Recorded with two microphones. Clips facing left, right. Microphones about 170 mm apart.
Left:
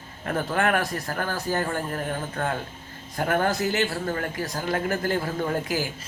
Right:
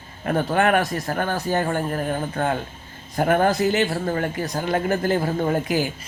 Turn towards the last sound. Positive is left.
turn(degrees=-20)  # may be behind; listen again after turning